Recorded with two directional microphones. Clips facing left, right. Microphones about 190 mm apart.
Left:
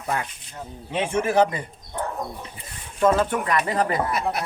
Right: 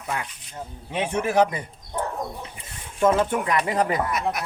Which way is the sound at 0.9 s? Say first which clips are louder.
Left 1 dB; 10° right (ahead or behind).